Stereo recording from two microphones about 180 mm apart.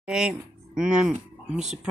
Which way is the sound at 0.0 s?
5° right (ahead or behind).